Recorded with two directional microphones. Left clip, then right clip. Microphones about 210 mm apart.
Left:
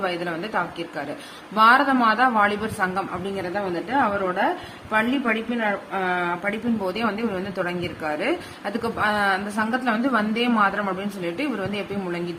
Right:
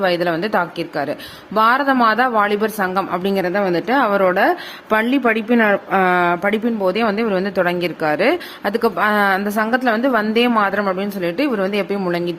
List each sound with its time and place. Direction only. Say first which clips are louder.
0.0 s a woman's voice: right 9 dB; 45° right (ahead or behind)